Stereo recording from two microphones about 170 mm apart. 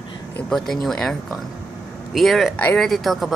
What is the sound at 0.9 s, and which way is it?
Speech, centre (ahead or behind).